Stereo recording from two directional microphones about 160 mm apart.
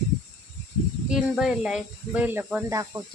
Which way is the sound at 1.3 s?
5° right (ahead or behind).